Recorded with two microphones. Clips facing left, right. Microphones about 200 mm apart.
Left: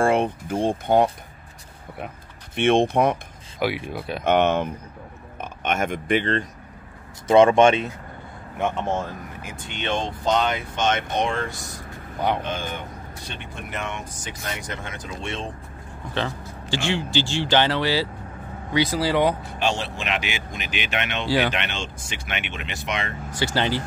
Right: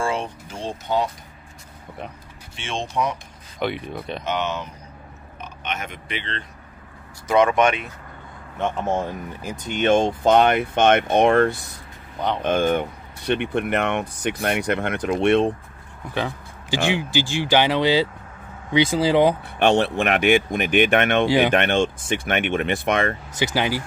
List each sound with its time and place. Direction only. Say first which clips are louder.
0.0 s speech: left 5 dB; 55° left (ahead or behind)
2.5 s speech: left 9 dB; 55° left (ahead or behind)
3.5 s speech: left 1 dB; 5° left (ahead or behind)
4.2 s speech: left 8 dB; 55° left (ahead or behind)
7.2 s speech: left 3 dB; 25° left (ahead or behind)
8.7 s speech: right 2 dB; 10° right (ahead or behind)
9.4 s speech: right 11 dB; 40° right (ahead or behind); by 15.5 s 65° right (ahead or behind)
16.2 s speech: right 1 dB; 15° right (ahead or behind)
19.4 s speech: right 7 dB; 60° right (ahead or behind)
23.4 s speech: right 1 dB; 10° right (ahead or behind)